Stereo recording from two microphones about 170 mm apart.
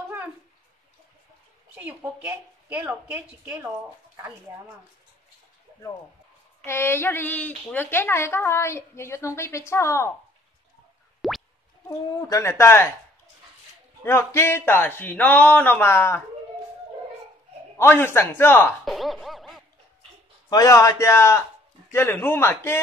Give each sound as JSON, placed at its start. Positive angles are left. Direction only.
{"t": 1.8, "sound": "a woman's voice", "side_deg": -10}
{"t": 6.6, "sound": "a woman's voice", "side_deg": 15}
{"t": 11.1, "sound": "music", "side_deg": 0}
{"t": 12.2, "sound": "a woman's voice", "side_deg": 20}
{"t": 14.0, "sound": "a woman's voice", "side_deg": 15}
{"t": 17.7, "sound": "a woman's voice", "side_deg": 15}
{"t": 18.9, "sound": "a sound", "side_deg": 0}
{"t": 20.4, "sound": "a man's voice", "side_deg": 20}